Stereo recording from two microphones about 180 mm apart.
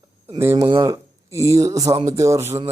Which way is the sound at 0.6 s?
30° right (ahead or behind).